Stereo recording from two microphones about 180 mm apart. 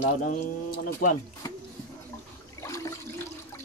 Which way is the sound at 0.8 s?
55° left (ahead or behind).